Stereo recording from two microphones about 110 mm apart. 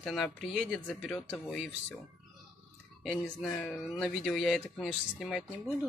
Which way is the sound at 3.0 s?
5° left (ahead or behind).